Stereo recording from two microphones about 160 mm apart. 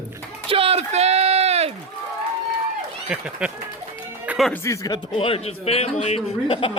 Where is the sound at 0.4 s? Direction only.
35° right (ahead or behind).